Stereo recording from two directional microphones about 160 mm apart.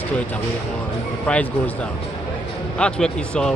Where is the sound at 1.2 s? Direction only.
10° left (ahead or behind).